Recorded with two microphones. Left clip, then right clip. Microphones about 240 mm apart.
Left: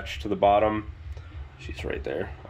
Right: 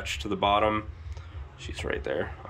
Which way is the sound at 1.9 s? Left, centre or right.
Right.